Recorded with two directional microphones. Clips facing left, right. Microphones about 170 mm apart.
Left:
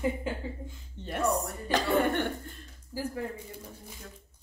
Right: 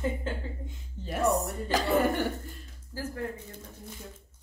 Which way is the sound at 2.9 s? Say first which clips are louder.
Left 1 dB; 10° left (ahead or behind).